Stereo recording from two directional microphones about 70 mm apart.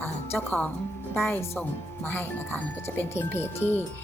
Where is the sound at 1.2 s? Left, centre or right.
Left.